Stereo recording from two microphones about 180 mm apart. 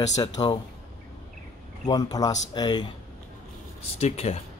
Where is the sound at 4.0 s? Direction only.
35° left (ahead or behind).